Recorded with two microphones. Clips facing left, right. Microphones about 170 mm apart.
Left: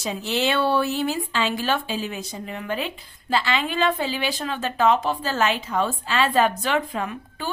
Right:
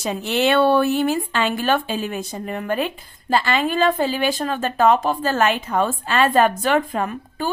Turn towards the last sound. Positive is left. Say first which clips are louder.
# right 5 dB
turn(degrees=-45)  # may be behind; listen again after turning